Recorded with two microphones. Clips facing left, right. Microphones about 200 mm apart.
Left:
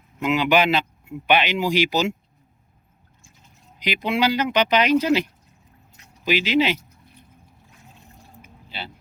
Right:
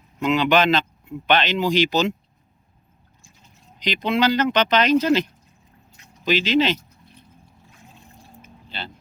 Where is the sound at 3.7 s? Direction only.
10° left (ahead or behind).